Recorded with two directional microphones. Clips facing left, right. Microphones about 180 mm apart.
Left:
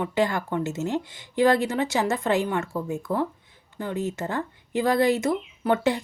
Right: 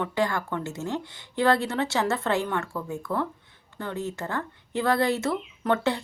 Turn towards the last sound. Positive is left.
turn(degrees=15)  # may be behind; listen again after turning